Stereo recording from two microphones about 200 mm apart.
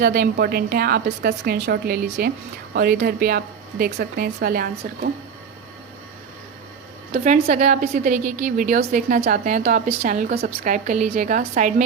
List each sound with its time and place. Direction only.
0.0 s a woman's voice: 50° right (ahead or behind)
7.1 s a woman's voice: 40° right (ahead or behind)